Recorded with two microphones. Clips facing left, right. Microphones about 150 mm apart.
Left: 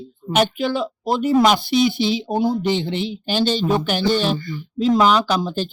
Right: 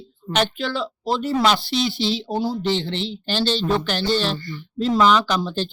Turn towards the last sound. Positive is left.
turn(degrees=10)  # may be behind; listen again after turning